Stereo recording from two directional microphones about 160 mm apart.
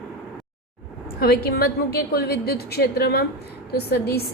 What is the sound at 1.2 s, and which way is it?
A woman's voice, 75° left (ahead or behind).